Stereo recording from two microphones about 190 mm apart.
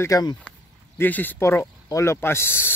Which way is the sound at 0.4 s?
10° left (ahead or behind).